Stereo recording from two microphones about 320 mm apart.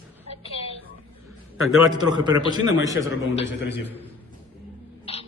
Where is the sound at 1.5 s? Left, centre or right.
Left.